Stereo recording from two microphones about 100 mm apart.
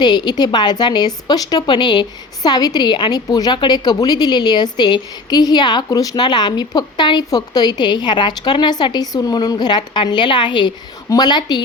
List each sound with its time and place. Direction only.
0.0 s a woman's voice: 45° left (ahead or behind)